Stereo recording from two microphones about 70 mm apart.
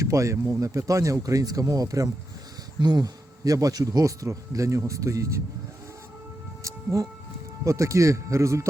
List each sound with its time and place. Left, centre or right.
0.0 s speech: right
2.8 s speech: right
6.6 s music: right
7.6 s speech: right